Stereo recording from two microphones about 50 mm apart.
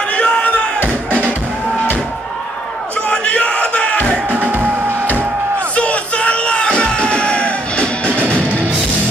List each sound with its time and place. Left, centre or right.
0.1 s a sound: left
3.1 s crowd: left
4.3 s music: right
5.8 s music: left